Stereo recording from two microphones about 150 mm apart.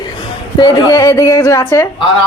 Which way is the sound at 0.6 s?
25° left (ahead or behind).